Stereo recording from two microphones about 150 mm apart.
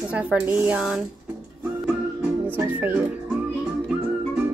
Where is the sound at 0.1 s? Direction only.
10° right (ahead or behind).